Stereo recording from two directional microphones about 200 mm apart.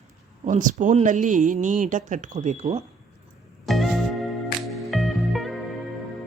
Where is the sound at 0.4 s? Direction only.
40° right (ahead or behind).